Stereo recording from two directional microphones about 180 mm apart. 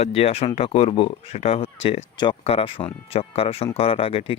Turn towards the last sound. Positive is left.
turn(degrees=30)  # may be behind; listen again after turning